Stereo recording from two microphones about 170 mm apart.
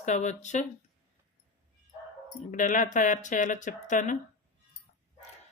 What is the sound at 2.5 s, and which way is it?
Speech, 50° left (ahead or behind).